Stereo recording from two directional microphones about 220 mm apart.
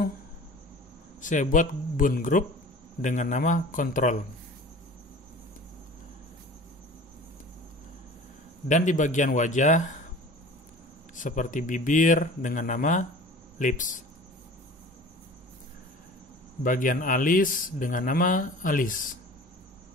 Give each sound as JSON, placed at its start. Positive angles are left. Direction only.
{"t": 1.2, "sound": "a man's voice", "side_deg": 35}
{"t": 8.6, "sound": "a man's voice", "side_deg": 35}
{"t": 11.1, "sound": "a man's voice", "side_deg": 35}
{"t": 16.6, "sound": "a man's voice", "side_deg": 35}